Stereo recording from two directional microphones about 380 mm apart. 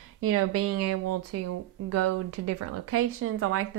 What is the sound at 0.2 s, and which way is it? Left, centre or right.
A woman's voice, right.